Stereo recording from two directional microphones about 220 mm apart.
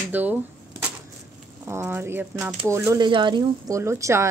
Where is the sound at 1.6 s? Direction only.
10° right (ahead or behind).